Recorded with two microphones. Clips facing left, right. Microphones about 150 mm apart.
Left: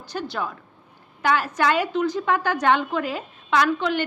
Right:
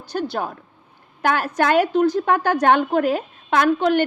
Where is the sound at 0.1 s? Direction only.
55° right (ahead or behind).